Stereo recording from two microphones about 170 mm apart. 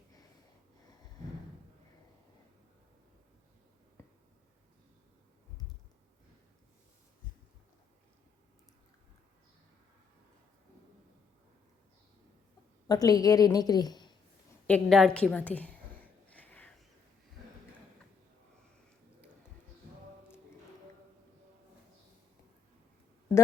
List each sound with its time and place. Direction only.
12.9 s a woman's voice: 20° left (ahead or behind)
14.7 s a woman's voice: 5° left (ahead or behind)
16.3 s a sound: 10° left (ahead or behind)